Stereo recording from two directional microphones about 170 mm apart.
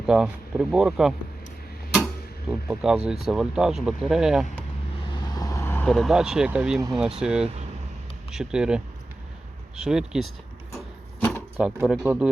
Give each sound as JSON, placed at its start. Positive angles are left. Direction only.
{"t": 0.0, "sound": "speech", "side_deg": -5}
{"t": 2.5, "sound": "speech", "side_deg": -5}
{"t": 5.1, "sound": "vehicle", "side_deg": 25}
{"t": 5.9, "sound": "speech", "side_deg": 0}
{"t": 9.8, "sound": "speech", "side_deg": -5}
{"t": 11.2, "sound": "a sound", "side_deg": 10}
{"t": 11.5, "sound": "speech", "side_deg": -5}